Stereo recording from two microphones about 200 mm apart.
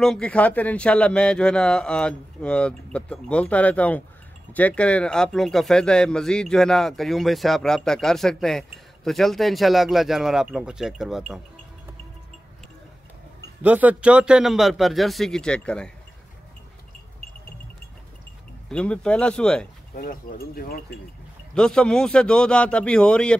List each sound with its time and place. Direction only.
0.0 s speech: 5° left (ahead or behind)
13.6 s speech: 10° right (ahead or behind)
18.7 s speech: 5° left (ahead or behind)
19.9 s speech: 45° left (ahead or behind)
21.5 s speech: 5° left (ahead or behind)